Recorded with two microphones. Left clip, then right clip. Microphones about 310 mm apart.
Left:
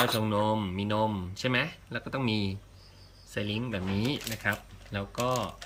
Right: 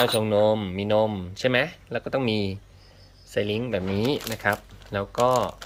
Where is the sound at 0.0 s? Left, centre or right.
Centre.